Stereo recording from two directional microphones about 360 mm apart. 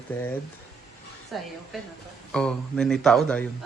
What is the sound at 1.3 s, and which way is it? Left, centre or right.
Speech, centre.